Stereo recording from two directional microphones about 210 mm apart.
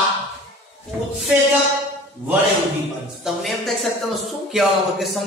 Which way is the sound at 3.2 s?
Centre (ahead or behind).